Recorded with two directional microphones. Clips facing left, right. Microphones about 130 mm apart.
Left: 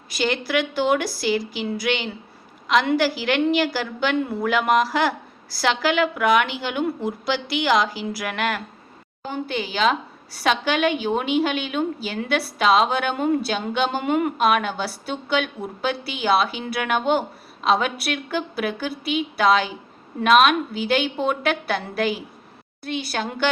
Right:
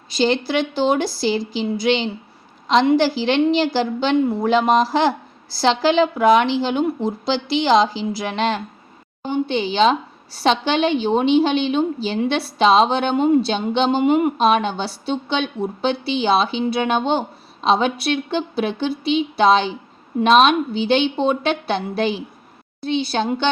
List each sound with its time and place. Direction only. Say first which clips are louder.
0.1 s a woman's voice: right 4 dB; 30° right (ahead or behind)